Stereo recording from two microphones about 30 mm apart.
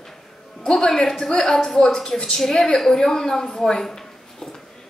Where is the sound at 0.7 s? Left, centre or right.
Centre.